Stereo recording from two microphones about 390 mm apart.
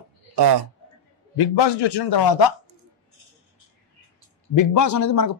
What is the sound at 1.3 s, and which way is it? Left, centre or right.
A man's voice, left.